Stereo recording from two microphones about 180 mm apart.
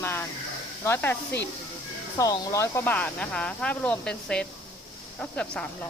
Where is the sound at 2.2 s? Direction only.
20° left (ahead or behind).